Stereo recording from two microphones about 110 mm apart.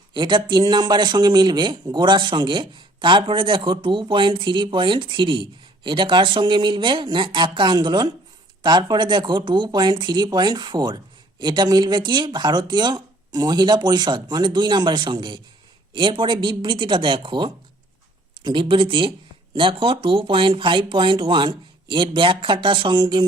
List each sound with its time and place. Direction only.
0.1 s a man's voice: 45° right (ahead or behind)